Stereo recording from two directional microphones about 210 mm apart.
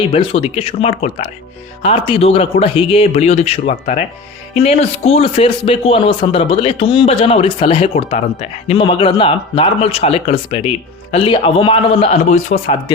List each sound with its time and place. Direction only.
0.1 s speech: 25° left (ahead or behind)